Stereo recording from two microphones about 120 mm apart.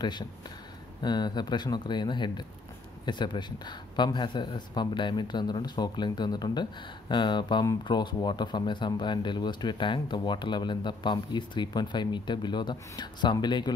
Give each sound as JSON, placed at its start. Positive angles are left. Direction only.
{"t": 1.0, "sound": "speech", "side_deg": 35}